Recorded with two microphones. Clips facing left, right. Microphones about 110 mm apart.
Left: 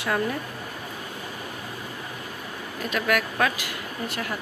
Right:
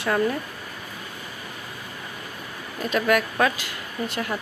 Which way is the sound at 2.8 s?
Centre (ahead or behind).